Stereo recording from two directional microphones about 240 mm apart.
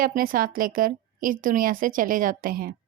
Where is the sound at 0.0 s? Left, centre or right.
Right.